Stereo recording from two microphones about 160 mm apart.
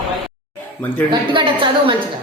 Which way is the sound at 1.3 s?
30° right (ahead or behind).